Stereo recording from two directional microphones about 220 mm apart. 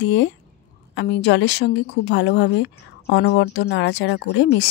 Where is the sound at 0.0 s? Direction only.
55° left (ahead or behind).